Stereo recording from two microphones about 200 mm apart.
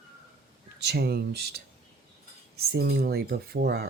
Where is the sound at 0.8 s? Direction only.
55° right (ahead or behind).